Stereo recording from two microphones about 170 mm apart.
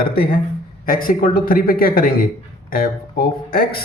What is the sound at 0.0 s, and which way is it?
A man's voice, 60° left (ahead or behind).